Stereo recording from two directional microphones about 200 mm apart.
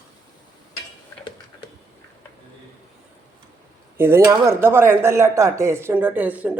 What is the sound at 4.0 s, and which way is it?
Speech, 10° right (ahead or behind).